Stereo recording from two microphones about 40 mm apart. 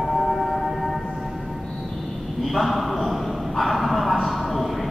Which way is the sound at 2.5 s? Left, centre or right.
Centre.